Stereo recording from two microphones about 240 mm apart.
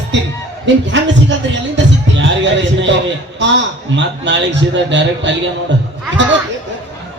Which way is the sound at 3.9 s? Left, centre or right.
Right.